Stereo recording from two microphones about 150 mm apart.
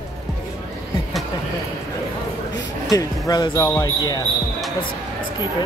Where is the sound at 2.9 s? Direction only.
25° left (ahead or behind).